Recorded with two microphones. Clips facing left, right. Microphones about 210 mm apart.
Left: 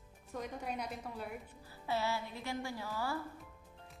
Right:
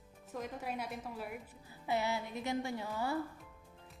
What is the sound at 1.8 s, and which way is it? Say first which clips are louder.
Speech: right 1 dB; 15° right (ahead or behind).